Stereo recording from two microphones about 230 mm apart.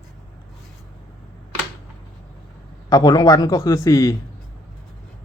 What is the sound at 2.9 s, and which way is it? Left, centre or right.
Speech, centre.